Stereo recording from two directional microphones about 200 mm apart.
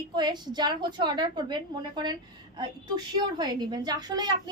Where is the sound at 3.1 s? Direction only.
20° right (ahead or behind).